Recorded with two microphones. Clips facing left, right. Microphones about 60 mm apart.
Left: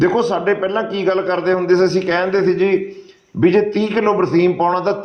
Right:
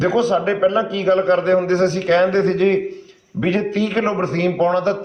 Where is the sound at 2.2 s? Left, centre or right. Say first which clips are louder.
Left 1 dB; left.